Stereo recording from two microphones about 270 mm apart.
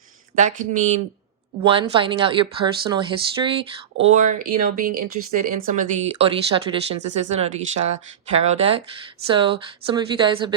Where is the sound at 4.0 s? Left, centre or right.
Right.